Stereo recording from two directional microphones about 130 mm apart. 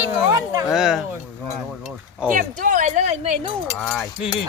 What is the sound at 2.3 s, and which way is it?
Speech, 90° right.